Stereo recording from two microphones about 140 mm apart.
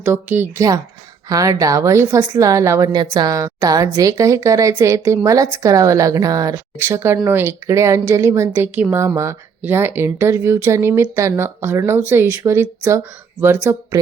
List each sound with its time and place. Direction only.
0.0 s a woman's voice: 15° right (ahead or behind)